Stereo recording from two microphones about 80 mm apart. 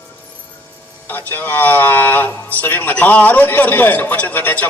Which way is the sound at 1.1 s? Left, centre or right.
Left.